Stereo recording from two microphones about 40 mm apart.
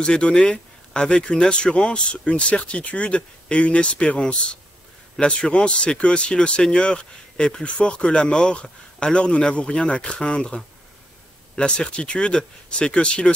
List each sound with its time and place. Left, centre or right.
0.0 s speech: left